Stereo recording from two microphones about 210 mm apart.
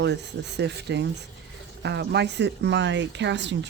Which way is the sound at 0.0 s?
55° right (ahead or behind).